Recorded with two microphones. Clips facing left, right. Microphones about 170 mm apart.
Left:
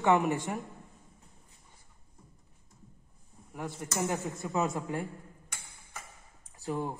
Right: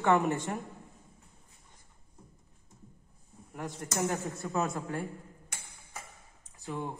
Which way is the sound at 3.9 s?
15° left (ahead or behind).